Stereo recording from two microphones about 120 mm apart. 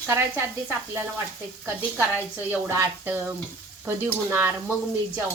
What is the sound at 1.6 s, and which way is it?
A woman's voice, 15° right (ahead or behind).